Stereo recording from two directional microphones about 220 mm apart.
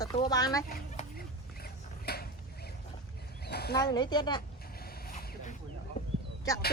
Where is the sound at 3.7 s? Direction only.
20° left (ahead or behind).